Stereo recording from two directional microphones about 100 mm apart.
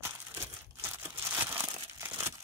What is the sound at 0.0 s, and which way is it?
Crumpling, 20° right (ahead or behind).